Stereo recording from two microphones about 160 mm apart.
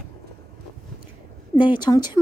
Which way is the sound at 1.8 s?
25° left (ahead or behind).